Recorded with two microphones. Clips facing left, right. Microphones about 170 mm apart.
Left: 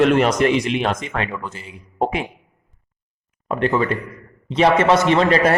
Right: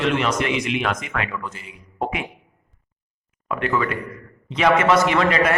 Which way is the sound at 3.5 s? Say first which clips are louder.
Left 4 dB; 30° left (ahead or behind).